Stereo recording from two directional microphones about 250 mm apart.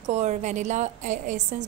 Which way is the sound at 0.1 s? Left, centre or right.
Right.